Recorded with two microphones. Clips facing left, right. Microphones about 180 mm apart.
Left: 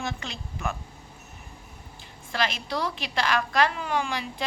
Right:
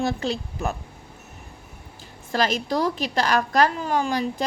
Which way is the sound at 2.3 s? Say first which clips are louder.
Right 6 dB; 40° right (ahead or behind).